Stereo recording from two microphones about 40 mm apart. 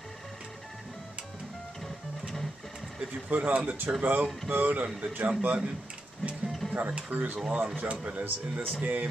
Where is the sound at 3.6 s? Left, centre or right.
Right.